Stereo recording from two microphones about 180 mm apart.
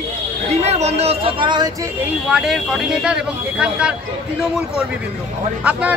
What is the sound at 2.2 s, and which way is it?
Speech, 5° right (ahead or behind).